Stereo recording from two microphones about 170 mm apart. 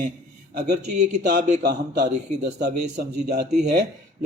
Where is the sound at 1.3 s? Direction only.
65° right (ahead or behind).